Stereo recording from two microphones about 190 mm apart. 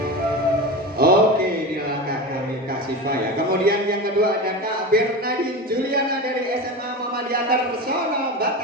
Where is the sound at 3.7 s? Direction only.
50° right (ahead or behind).